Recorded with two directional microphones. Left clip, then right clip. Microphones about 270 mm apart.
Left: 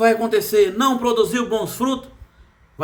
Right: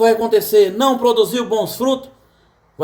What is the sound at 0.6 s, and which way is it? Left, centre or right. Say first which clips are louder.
Speech: right 2 dB; left.